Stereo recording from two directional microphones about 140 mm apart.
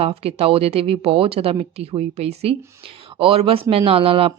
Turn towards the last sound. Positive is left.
turn(degrees=-40)  # may be behind; listen again after turning